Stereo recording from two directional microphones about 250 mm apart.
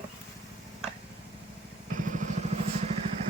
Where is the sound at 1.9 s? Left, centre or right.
Right.